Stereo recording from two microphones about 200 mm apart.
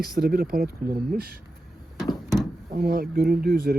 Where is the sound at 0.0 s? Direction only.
50° right (ahead or behind).